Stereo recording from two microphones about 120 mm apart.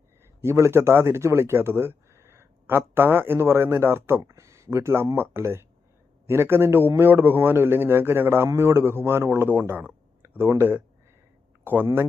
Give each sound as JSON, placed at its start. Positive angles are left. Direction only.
{"t": 0.4, "sound": "speech", "side_deg": -25}